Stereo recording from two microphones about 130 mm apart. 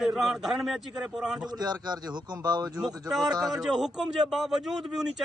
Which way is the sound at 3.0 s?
Centre (ahead or behind).